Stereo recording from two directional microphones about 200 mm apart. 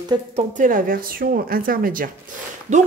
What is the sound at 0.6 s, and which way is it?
Speech, 45° right (ahead or behind).